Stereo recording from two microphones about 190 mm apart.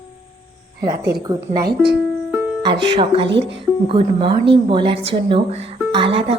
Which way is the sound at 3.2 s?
70° right (ahead or behind).